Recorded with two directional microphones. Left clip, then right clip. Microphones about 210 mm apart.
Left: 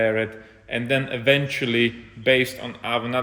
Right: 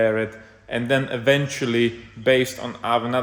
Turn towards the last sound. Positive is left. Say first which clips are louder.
# right 3 dB
turn(degrees=-10)  # may be behind; listen again after turning